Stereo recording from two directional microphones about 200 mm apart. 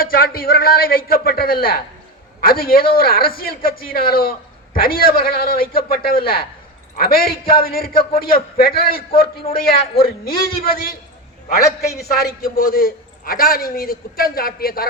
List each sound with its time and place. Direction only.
0.0 s a man's voice: 50° left (ahead or behind)
12.2 s a man's voice: 45° left (ahead or behind)